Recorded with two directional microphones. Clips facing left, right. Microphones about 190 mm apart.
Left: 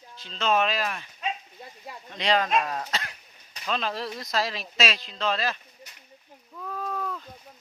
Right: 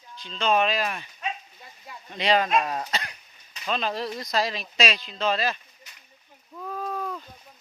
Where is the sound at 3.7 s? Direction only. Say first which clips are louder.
Right 2 dB; centre (ahead or behind).